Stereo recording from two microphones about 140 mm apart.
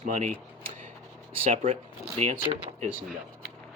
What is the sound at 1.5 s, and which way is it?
Speech, 55° right (ahead or behind).